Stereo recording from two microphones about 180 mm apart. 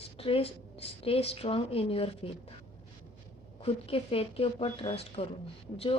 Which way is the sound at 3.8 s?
30° left (ahead or behind).